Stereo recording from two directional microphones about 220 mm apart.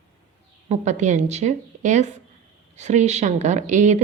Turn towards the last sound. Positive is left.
turn(degrees=-35)  # may be behind; listen again after turning